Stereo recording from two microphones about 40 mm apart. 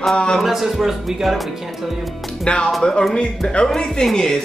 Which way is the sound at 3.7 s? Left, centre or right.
Centre.